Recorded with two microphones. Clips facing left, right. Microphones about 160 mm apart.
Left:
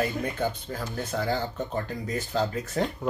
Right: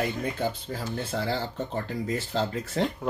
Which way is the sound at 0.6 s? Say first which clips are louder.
Right 1 dB; 30° right (ahead or behind).